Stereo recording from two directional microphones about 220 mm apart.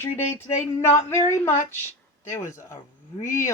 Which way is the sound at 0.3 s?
10° left (ahead or behind).